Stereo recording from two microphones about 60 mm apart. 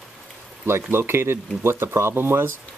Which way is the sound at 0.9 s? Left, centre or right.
Right.